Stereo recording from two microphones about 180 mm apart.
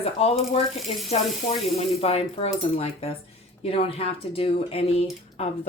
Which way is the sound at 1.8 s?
35° left (ahead or behind).